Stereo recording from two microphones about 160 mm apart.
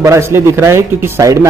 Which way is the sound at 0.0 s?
15° right (ahead or behind).